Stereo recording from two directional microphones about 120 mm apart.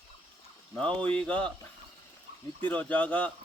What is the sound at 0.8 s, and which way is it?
Speech, 10° left (ahead or behind).